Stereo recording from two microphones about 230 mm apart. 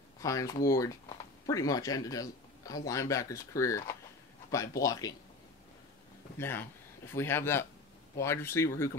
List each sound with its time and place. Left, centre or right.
0.2 s speech: centre
6.3 s speech: centre